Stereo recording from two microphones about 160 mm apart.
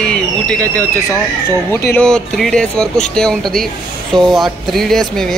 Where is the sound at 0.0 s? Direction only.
5° left (ahead or behind).